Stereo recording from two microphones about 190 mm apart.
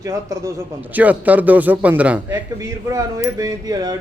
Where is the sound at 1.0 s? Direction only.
10° right (ahead or behind).